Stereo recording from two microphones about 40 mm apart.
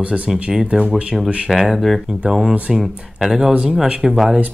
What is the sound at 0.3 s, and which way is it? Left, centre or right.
Speech, centre.